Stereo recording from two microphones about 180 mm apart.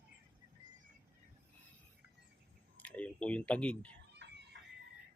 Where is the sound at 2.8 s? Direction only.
5° left (ahead or behind).